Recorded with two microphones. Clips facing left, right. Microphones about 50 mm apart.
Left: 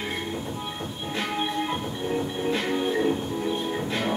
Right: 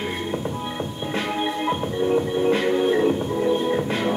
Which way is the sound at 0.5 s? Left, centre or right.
Centre.